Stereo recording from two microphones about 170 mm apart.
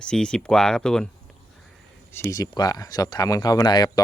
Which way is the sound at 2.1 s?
15° left (ahead or behind).